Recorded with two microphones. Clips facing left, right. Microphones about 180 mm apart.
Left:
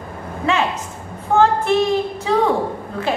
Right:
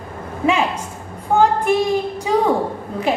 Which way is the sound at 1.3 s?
15° right (ahead or behind).